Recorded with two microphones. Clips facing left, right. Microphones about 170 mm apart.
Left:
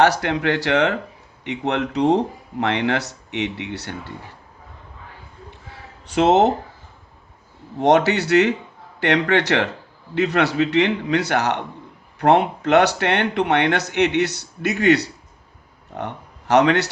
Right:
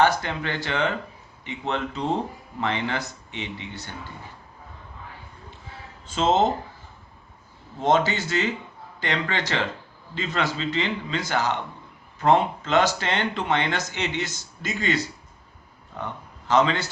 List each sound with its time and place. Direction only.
0.0 s speech: 75° left (ahead or behind)
6.1 s speech: 70° left (ahead or behind)
7.8 s speech: 70° left (ahead or behind)